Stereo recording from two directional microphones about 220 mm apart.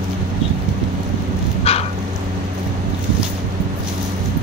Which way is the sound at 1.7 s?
25° left (ahead or behind).